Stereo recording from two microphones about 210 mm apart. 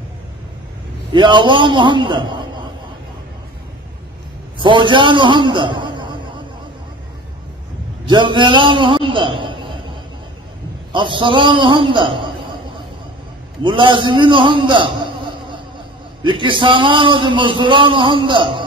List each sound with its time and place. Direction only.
1.1 s a man's voice: 20° right (ahead or behind)
4.6 s a man's voice: 25° right (ahead or behind)
8.1 s a man's voice: 20° right (ahead or behind)
10.9 s a man's voice: 25° right (ahead or behind)
13.6 s a man's voice: 20° right (ahead or behind)